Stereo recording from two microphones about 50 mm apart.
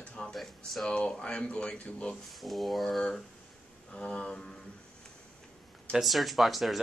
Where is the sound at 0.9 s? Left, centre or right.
Left.